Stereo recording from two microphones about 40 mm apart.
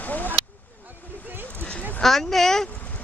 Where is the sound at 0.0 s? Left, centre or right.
Left.